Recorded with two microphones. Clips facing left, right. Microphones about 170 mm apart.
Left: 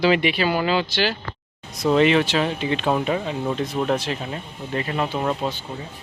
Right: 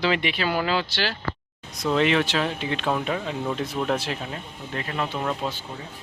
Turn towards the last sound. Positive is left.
turn(degrees=20)  # may be behind; listen again after turning